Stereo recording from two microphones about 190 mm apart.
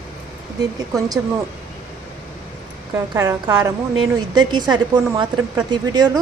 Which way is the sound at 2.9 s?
15° right (ahead or behind).